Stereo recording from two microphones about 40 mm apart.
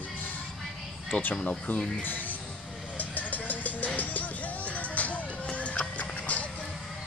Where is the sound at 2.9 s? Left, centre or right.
Left.